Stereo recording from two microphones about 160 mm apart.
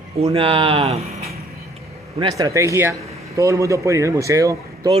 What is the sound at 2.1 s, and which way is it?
A man's voice, 25° right (ahead or behind).